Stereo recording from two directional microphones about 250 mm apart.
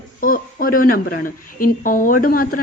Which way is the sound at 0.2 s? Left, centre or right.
Left.